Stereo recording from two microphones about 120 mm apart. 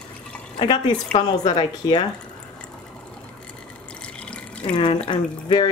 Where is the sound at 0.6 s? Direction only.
45° left (ahead or behind).